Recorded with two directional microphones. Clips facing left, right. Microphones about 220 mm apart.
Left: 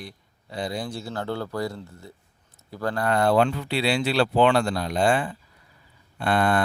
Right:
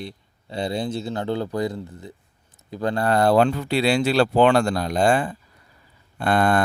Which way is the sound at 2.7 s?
20° right (ahead or behind).